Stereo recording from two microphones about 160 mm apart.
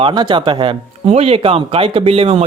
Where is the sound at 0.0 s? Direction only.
30° right (ahead or behind).